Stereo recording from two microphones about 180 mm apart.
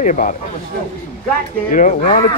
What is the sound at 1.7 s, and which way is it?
Speech, 45° left (ahead or behind).